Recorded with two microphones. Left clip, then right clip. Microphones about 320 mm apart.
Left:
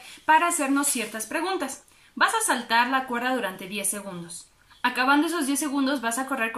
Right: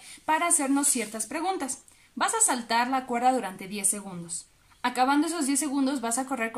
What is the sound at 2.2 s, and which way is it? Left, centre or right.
A woman's voice, centre.